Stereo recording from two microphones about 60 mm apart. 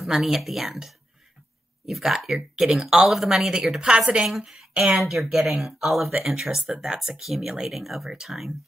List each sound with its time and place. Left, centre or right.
0.0 s speech: centre
2.1 s speech: centre
4.3 s speech: centre